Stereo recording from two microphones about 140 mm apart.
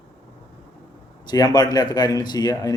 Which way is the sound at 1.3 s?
30° left (ahead or behind).